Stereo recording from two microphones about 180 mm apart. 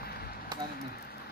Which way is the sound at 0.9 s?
60° left (ahead or behind).